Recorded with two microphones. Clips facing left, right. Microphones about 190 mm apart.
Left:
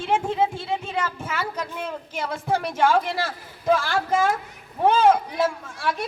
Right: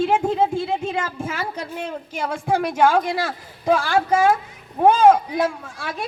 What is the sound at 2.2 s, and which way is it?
Speech, 50° right (ahead or behind).